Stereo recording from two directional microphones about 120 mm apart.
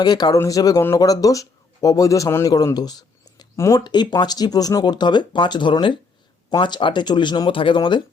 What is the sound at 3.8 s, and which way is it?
Speech, 35° left (ahead or behind).